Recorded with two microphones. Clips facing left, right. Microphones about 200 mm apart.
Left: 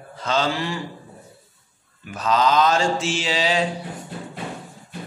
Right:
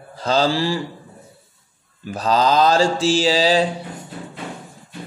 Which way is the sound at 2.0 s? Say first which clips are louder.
Right 2 dB; 35° right (ahead or behind).